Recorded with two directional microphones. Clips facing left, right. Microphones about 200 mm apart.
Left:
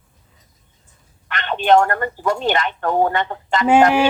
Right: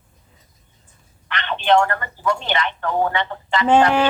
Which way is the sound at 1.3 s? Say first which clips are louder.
Left 3 dB; 45° left (ahead or behind).